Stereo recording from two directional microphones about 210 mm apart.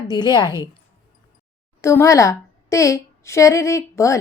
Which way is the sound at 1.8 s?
15° left (ahead or behind).